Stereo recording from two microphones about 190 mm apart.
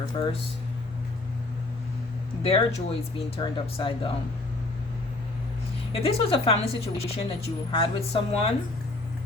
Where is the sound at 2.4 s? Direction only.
35° left (ahead or behind).